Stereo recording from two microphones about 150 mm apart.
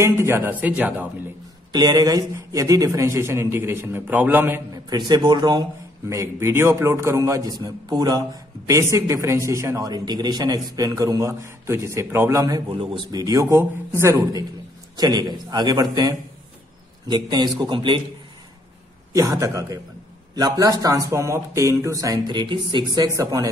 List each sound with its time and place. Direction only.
0.0 s speech: 15° right (ahead or behind)
1.7 s speech: 30° right (ahead or behind); by 4.6 s 10° right (ahead or behind)
4.8 s speech: 30° right (ahead or behind)
12.7 s speech: 35° right (ahead or behind)
13.2 s speech: 20° right (ahead or behind)
15.0 s speech: 30° right (ahead or behind)
19.1 s speech: 25° right (ahead or behind)